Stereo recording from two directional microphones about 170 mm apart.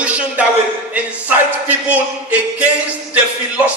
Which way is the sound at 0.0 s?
10° right (ahead or behind).